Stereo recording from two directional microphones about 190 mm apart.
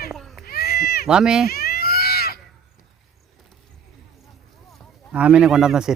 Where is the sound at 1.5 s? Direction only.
55° left (ahead or behind).